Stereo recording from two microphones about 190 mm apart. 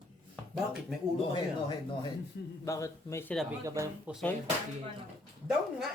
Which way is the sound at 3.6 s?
15° right (ahead or behind).